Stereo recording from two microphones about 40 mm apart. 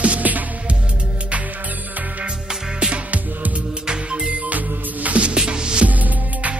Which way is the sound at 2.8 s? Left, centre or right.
Right.